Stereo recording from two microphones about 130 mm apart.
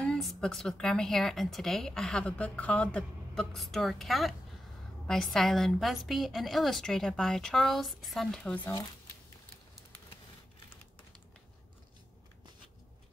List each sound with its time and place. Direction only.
0.0 s a woman's voice: 5° left (ahead or behind)
8.5 s speech: 15° left (ahead or behind)